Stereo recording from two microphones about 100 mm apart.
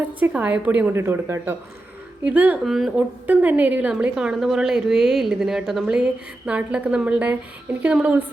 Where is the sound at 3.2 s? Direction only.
15° right (ahead or behind).